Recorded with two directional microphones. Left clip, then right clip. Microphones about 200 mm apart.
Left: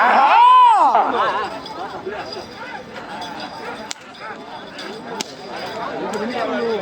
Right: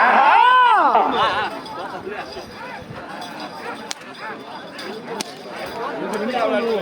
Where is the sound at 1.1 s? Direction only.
30° right (ahead or behind).